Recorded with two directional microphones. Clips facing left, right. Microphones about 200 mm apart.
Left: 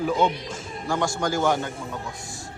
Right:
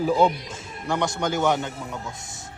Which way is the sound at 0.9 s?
20° right (ahead or behind).